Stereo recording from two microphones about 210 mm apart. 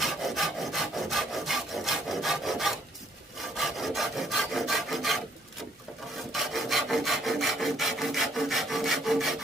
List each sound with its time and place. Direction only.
0.0 s wood: centre (ahead or behind)
6.3 s wood: centre (ahead or behind)